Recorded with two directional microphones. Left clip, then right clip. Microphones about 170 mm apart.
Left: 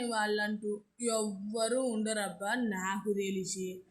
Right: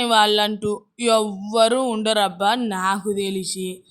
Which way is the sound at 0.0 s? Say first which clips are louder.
Right 16 dB; 60° right (ahead or behind).